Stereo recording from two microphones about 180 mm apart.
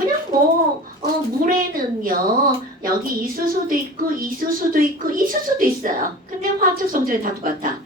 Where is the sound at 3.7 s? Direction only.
50° right (ahead or behind).